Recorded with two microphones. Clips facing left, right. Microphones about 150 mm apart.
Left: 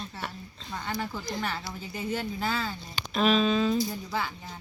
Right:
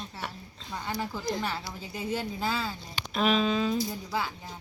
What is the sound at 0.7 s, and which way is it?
A woman's voice, 10° right (ahead or behind).